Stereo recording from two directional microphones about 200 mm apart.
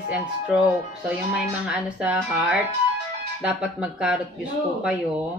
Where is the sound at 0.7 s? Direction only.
15° right (ahead or behind).